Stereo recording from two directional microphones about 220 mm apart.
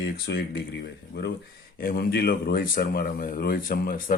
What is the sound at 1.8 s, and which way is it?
Speech, 45° left (ahead or behind).